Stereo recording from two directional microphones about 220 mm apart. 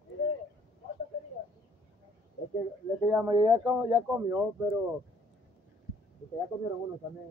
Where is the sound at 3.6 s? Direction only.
10° right (ahead or behind).